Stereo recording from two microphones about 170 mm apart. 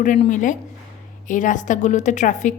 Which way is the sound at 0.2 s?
50° left (ahead or behind).